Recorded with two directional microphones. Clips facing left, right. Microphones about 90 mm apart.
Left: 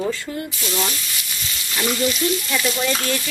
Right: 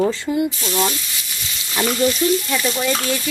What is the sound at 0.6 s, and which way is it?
Speech, 30° right (ahead or behind).